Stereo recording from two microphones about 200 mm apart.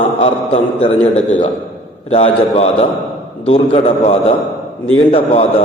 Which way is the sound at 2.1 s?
30° left (ahead or behind).